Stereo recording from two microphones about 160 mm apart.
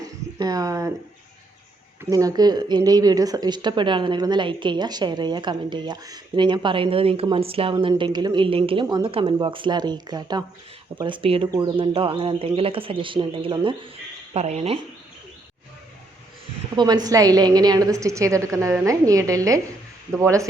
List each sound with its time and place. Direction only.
0.0 s a sound: 25° right (ahead or behind)
2.0 s speech: 20° right (ahead or behind)
14.3 s speech: 45° right (ahead or behind)
16.7 s speech: 25° right (ahead or behind)